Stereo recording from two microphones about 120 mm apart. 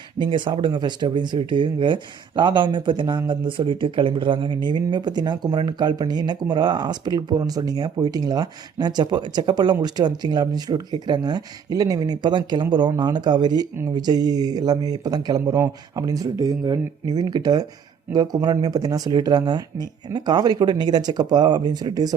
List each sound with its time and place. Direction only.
0.2 s speech: 40° right (ahead or behind)